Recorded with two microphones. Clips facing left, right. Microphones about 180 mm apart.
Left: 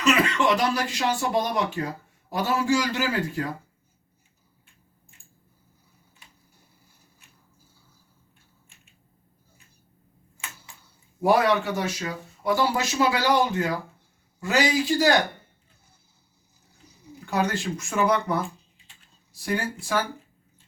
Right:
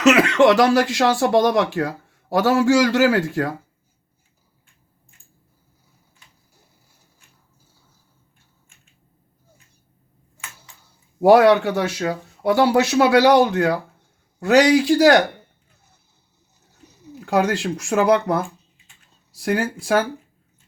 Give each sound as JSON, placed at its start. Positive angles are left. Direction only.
{"t": 0.0, "sound": "speech", "side_deg": -80}
{"t": 11.2, "sound": "speech", "side_deg": -70}
{"t": 17.2, "sound": "speech", "side_deg": -85}